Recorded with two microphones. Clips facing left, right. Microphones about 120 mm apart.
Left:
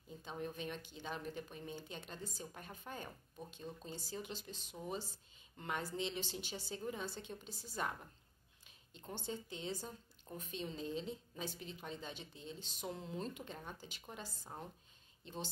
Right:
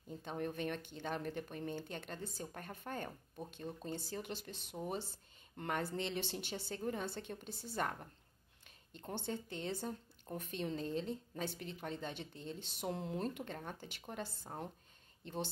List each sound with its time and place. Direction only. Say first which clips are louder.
0.2 s speech: right 4 dB; 55° right (ahead or behind)